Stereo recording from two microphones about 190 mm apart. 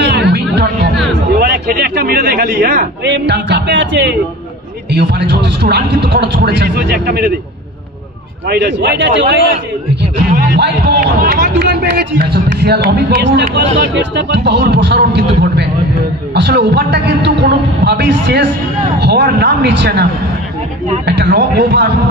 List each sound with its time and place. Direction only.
0.0 s music: 60° right (ahead or behind)
1.4 s speech: 50° right (ahead or behind)
8.5 s speech: 65° right (ahead or behind)
10.5 s speech: 60° right (ahead or behind)